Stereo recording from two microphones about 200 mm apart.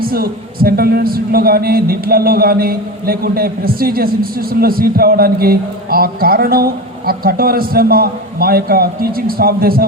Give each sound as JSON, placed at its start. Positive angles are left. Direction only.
{"t": 0.0, "sound": "speech", "side_deg": -50}